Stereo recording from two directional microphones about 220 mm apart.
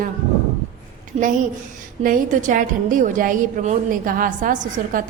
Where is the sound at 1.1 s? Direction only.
30° right (ahead or behind).